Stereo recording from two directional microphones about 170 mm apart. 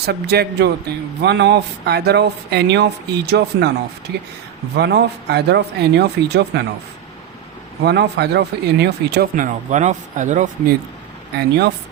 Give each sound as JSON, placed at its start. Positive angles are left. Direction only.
{"t": 0.0, "sound": "speech", "side_deg": -70}
{"t": 4.8, "sound": "speech", "side_deg": -75}
{"t": 7.9, "sound": "speech", "side_deg": -75}
{"t": 9.3, "sound": "speech", "side_deg": -50}
{"t": 11.3, "sound": "speech", "side_deg": -80}